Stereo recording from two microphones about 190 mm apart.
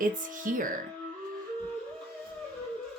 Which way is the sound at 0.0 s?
45° right (ahead or behind).